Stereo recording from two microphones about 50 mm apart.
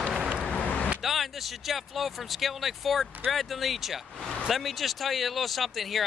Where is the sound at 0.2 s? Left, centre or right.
Right.